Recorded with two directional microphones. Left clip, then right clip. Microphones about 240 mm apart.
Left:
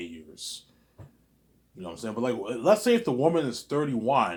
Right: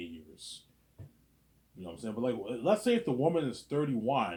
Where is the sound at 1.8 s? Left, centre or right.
Centre.